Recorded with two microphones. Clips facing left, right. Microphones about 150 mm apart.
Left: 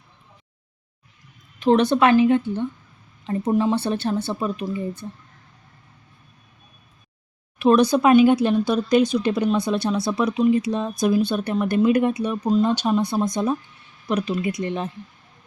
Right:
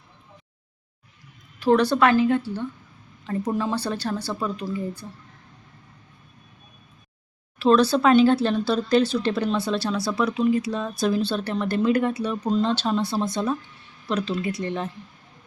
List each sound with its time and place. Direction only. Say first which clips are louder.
1.5 s speech: left 2 dB; 20° left (ahead or behind)
7.6 s speech: left 2 dB; 15° left (ahead or behind)